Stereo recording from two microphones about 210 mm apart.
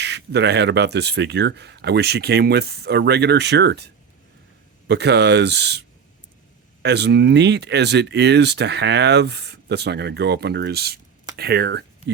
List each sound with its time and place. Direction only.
0.0 s speech: 55° right (ahead or behind)
6.8 s speech: 55° right (ahead or behind)